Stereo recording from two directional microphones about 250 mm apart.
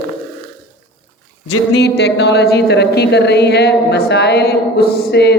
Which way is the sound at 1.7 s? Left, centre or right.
Left.